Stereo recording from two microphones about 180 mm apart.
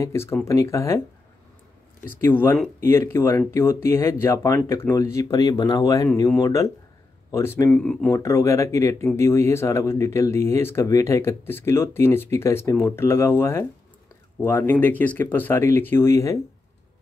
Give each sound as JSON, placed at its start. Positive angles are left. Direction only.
{"t": 0.0, "sound": "speech", "side_deg": 15}
{"t": 2.1, "sound": "speech", "side_deg": 10}